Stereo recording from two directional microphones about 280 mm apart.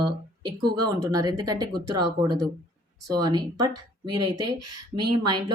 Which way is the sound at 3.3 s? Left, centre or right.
Centre.